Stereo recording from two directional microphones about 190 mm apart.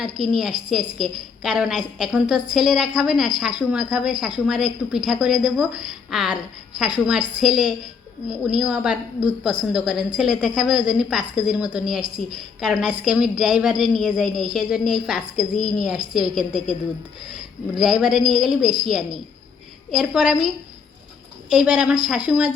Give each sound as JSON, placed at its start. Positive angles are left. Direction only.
{"t": 0.0, "sound": "a woman's voice", "side_deg": 0}
{"t": 21.5, "sound": "a woman's voice", "side_deg": -5}